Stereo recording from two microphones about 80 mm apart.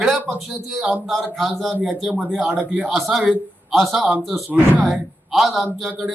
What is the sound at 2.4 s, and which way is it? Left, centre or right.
Speech, centre.